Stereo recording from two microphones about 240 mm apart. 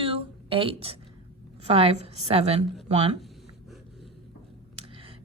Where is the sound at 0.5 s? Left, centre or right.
Right.